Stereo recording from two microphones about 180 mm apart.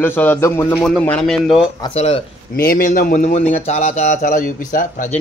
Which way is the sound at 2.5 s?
55° left (ahead or behind).